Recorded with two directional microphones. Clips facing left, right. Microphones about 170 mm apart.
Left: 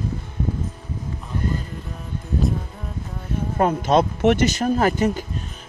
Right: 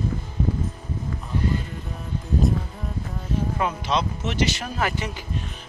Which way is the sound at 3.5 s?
45° left (ahead or behind).